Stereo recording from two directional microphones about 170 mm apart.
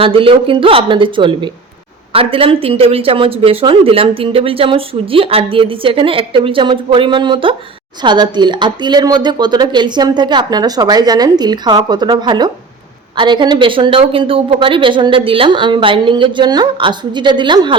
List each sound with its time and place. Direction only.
0.0 s speech: 30° right (ahead or behind)